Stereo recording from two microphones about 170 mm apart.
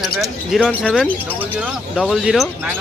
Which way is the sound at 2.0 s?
5° right (ahead or behind).